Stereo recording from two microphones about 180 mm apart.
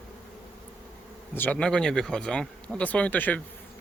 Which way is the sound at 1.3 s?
10° left (ahead or behind).